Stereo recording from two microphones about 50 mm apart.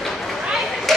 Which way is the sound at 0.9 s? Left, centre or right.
Centre.